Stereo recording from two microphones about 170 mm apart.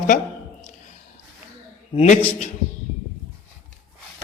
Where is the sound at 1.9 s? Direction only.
40° left (ahead or behind).